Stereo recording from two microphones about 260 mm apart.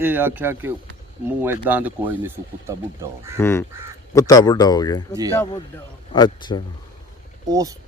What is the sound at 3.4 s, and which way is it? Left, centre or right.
Speech, centre.